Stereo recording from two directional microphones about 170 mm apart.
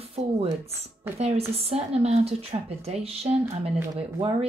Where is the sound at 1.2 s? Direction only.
40° right (ahead or behind).